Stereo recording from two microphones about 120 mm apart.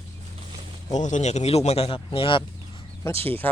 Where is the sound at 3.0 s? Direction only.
20° left (ahead or behind).